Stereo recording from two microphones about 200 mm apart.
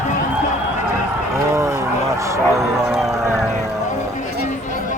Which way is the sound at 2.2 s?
15° right (ahead or behind).